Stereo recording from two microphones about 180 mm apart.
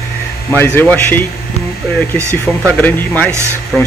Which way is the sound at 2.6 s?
10° left (ahead or behind).